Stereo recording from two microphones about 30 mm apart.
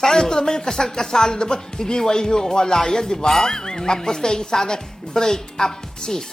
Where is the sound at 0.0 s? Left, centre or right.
Centre.